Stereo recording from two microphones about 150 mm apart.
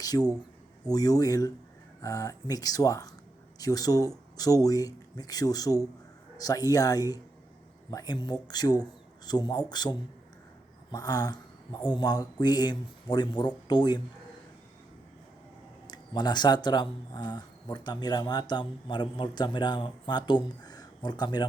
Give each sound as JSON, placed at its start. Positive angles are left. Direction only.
{"t": 0.0, "sound": "speech", "side_deg": 25}
{"t": 10.9, "sound": "speech", "side_deg": 25}
{"t": 15.9, "sound": "speech", "side_deg": 30}